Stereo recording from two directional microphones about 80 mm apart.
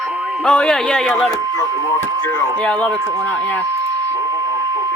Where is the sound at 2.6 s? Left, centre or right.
Centre.